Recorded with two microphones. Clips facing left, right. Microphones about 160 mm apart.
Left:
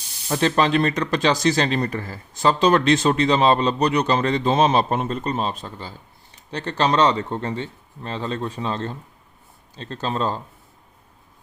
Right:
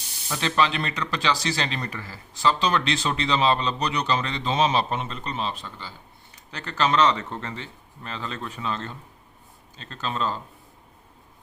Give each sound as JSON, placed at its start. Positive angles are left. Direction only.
{"t": 0.3, "sound": "speech", "side_deg": 40}